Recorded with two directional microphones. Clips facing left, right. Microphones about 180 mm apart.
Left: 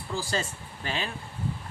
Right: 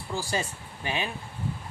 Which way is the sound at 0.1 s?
15° right (ahead or behind).